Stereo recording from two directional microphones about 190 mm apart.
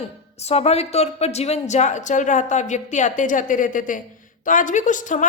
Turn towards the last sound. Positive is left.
turn(degrees=40)  # may be behind; listen again after turning